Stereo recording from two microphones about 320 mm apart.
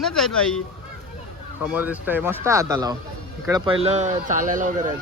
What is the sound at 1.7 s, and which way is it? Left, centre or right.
Speech, centre.